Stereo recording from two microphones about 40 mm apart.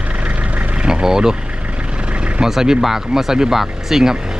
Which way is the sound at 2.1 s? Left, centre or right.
Right.